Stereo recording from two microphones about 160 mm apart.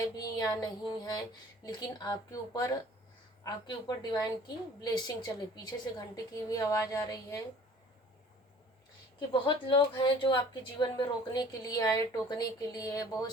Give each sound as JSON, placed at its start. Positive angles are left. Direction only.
{"t": 0.2, "sound": "a woman's voice", "side_deg": 25}
{"t": 9.1, "sound": "a woman's voice", "side_deg": 30}